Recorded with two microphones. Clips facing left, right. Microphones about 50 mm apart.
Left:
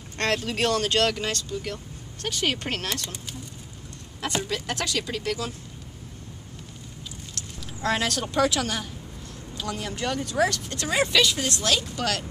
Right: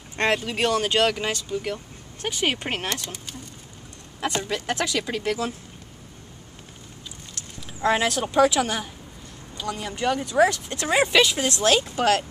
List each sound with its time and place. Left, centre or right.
0.2 s speech: centre
4.6 s speech: centre
7.3 s speech: centre
11.6 s speech: right